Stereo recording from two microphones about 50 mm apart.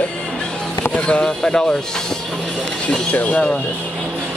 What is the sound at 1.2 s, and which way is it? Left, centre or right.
Speech, centre.